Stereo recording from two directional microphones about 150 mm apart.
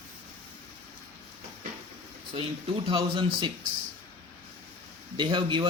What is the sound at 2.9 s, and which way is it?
Speech, 35° right (ahead or behind).